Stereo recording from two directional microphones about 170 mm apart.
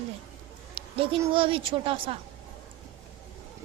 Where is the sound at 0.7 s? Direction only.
30° right (ahead or behind).